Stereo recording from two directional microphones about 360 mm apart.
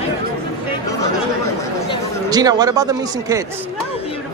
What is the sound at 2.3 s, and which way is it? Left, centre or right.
Speech, centre.